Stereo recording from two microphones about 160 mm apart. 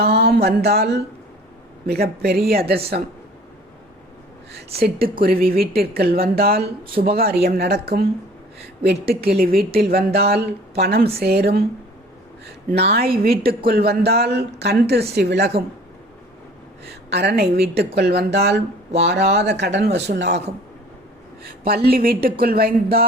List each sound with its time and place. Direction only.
0.0 s a sound: 85° right
1.9 s speech: 80° right
4.5 s a woman's voice: 75° right (ahead or behind)
12.7 s a woman's voice: 80° right
16.8 s a woman's voice: 90° right
21.4 s a woman's voice: 70° right (ahead or behind)